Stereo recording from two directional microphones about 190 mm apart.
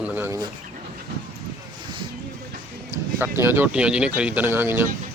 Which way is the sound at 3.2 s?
10° right (ahead or behind).